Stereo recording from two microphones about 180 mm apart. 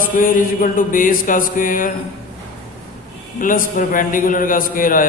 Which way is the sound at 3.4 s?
50° left (ahead or behind).